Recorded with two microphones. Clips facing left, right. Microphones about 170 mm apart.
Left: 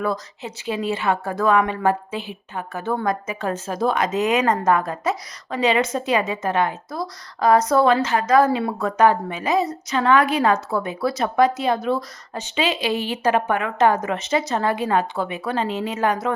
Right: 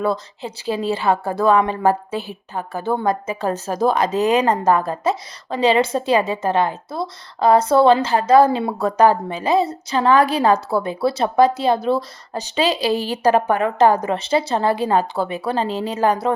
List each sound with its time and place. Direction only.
0.0 s a woman's voice: 30° right (ahead or behind)